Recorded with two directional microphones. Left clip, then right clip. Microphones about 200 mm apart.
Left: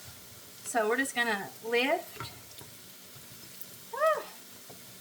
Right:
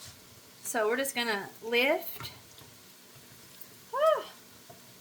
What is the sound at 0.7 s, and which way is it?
Speech, 30° right (ahead or behind).